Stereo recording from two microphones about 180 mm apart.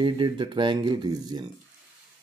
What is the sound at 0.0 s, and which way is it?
Speech, 25° right (ahead or behind).